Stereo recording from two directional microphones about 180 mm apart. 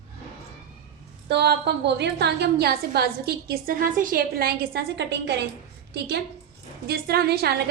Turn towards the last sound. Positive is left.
turn(degrees=-60)  # may be behind; listen again after turning